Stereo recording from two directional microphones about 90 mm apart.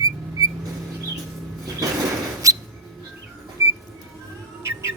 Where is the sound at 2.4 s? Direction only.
40° right (ahead or behind).